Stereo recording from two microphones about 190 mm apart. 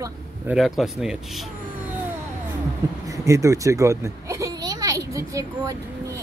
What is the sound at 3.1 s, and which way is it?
A child's voice, 15° right (ahead or behind).